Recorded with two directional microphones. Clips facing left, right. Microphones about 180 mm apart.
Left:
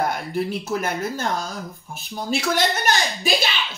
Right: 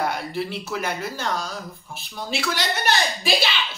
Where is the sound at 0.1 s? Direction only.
45° left (ahead or behind).